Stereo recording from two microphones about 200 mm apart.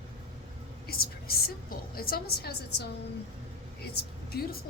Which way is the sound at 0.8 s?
50° left (ahead or behind).